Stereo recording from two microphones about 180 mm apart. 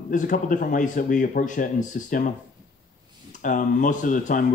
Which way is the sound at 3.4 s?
45° left (ahead or behind).